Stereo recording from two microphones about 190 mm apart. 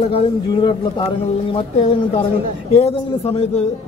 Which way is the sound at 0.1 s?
25° left (ahead or behind).